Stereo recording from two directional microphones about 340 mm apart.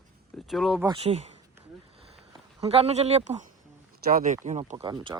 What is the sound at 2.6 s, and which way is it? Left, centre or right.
Speech, centre.